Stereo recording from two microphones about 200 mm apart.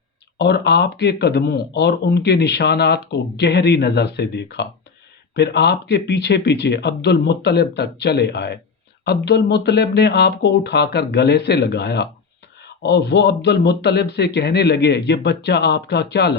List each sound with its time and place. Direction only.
0.3 s speech: 60° left (ahead or behind)